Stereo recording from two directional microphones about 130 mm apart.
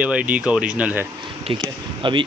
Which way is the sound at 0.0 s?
10° right (ahead or behind).